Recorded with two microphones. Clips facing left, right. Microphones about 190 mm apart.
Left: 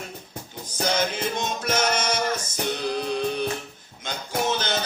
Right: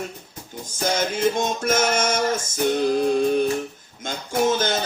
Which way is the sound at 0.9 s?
50° right (ahead or behind).